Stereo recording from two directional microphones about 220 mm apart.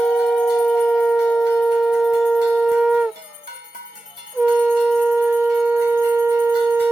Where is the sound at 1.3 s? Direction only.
Centre (ahead or behind).